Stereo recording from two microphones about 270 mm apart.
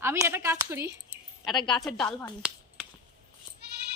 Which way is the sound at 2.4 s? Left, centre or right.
Centre.